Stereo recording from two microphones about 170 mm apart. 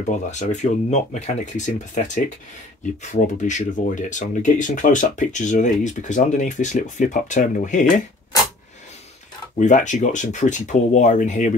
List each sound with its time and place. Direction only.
0.0 s speech: 45° left (ahead or behind)
3.0 s speech: 45° left (ahead or behind)
9.6 s speech: 45° left (ahead or behind)